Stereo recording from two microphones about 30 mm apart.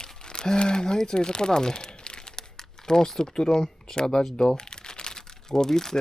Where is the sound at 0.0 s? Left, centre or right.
Left.